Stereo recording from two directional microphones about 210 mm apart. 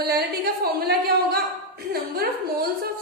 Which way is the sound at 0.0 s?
50° right (ahead or behind).